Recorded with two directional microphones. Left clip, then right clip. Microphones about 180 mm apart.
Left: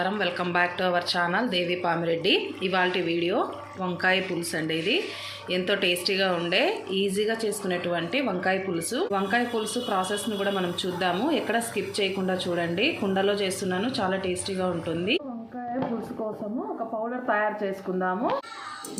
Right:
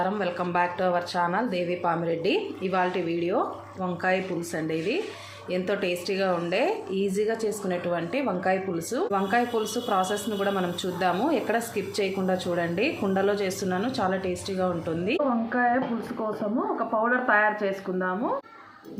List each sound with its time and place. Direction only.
0.0 s a woman's voice: centre (ahead or behind)
17.0 s a woman's voice: centre (ahead or behind)